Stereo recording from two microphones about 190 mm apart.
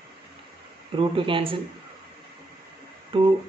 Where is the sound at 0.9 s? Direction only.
25° right (ahead or behind).